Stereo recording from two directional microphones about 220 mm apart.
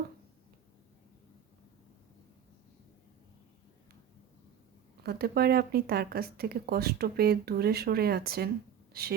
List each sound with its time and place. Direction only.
5.0 s speech: 45° right (ahead or behind)